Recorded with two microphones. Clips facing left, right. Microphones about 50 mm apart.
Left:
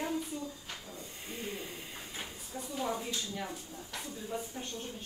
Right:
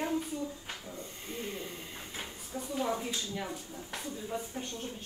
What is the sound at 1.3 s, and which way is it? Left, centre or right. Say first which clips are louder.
Hiss: right 1 dB; centre.